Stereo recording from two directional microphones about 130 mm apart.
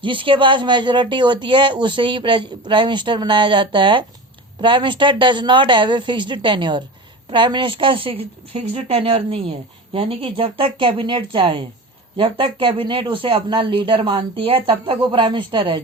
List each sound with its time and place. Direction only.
0.0 s speech: 40° right (ahead or behind)